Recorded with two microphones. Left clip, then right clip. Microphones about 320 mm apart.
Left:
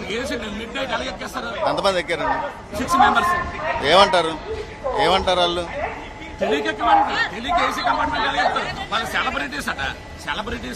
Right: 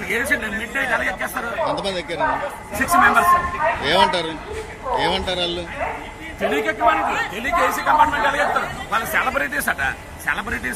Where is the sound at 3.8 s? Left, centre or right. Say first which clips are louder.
Left 5 dB; left.